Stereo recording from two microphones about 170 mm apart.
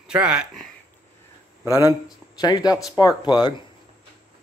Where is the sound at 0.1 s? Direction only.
5° right (ahead or behind).